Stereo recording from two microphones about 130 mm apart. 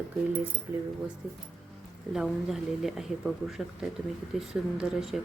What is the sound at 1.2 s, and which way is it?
Speech, 5° right (ahead or behind).